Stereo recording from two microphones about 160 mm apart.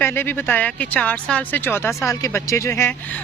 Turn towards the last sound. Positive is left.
turn(degrees=15)  # may be behind; listen again after turning